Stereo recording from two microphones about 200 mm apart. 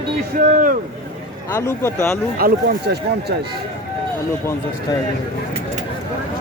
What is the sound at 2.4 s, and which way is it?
Speech, 50° right (ahead or behind).